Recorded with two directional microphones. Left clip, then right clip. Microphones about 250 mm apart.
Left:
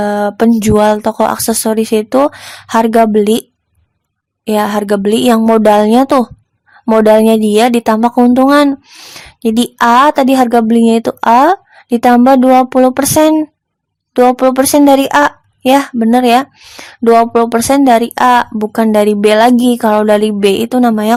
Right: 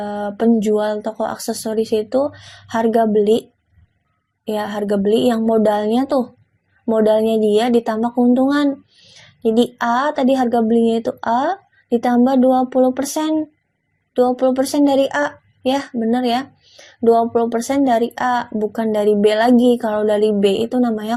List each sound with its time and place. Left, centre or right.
0.0 s a woman's voice: left
4.4 s a woman's voice: left